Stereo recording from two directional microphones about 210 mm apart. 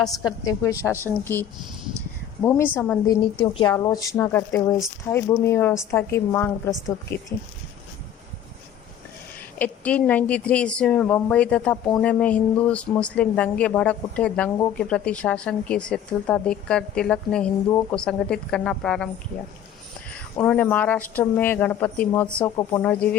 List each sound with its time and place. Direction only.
0.2 s a woman's voice: 15° left (ahead or behind)
3.4 s speech: 20° left (ahead or behind)
9.6 s a woman's voice: 5° left (ahead or behind)
20.4 s speech: 5° left (ahead or behind)